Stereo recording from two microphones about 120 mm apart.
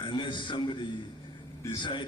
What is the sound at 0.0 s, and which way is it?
A man's voice, 40° left (ahead or behind).